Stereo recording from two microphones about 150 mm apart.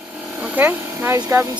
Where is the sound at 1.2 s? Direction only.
20° right (ahead or behind).